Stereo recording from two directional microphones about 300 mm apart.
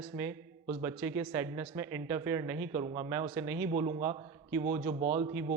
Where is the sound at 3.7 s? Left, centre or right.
Right.